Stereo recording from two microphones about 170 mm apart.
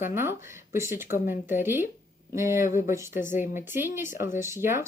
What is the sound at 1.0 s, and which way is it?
Speech, 55° left (ahead or behind).